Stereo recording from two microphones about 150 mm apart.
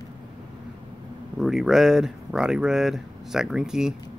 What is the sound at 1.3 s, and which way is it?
Speech, centre (ahead or behind).